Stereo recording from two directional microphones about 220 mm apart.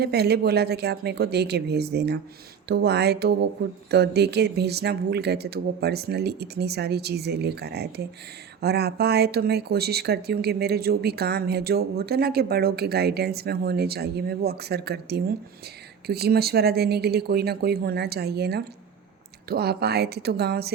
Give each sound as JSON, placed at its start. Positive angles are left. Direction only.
{"t": 0.0, "sound": "speech", "side_deg": -45}